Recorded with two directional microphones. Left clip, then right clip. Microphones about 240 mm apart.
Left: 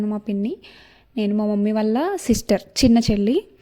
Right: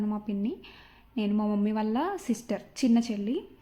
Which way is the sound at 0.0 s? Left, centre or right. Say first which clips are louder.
Left 7 dB; left.